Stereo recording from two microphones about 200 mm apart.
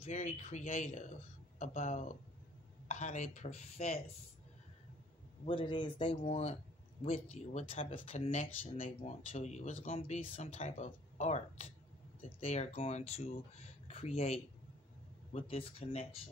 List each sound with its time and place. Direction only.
0.0 s a man's voice: 35° left (ahead or behind)
5.4 s a man's voice: 25° left (ahead or behind)